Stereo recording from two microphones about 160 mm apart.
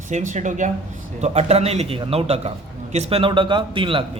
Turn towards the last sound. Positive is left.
turn(degrees=-30)  # may be behind; listen again after turning